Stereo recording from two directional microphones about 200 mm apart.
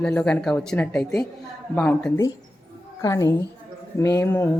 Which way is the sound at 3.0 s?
15° left (ahead or behind).